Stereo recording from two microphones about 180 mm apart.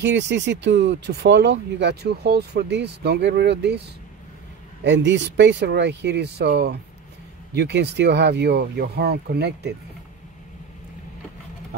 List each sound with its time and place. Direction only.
0.0 s speech: 75° right (ahead or behind)
4.8 s speech: 85° right; by 9.7 s 65° right (ahead or behind)